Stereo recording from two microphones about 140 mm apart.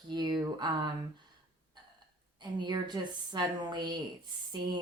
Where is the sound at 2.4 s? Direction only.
30° right (ahead or behind).